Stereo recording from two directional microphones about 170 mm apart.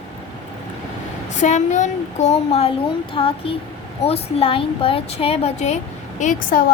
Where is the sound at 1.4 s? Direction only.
45° left (ahead or behind).